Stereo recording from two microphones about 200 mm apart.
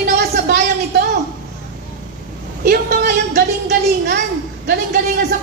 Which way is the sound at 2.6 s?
50° right (ahead or behind).